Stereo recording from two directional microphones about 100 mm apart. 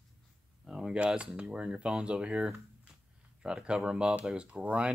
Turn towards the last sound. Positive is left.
turn(degrees=-10)  # may be behind; listen again after turning